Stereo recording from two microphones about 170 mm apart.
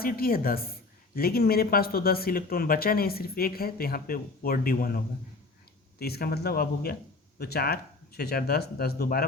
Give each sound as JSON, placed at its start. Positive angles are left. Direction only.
{"t": 0.0, "sound": "speech", "side_deg": 60}